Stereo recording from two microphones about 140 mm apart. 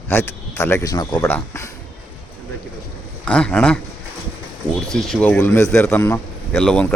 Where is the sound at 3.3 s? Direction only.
5° left (ahead or behind).